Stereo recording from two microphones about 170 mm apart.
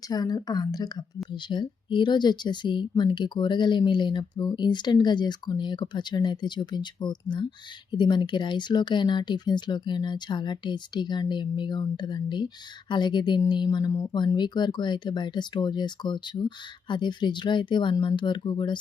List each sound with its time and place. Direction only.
0.1 s speech: 20° left (ahead or behind)